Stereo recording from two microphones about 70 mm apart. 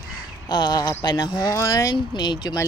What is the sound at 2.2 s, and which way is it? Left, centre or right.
Speech, left.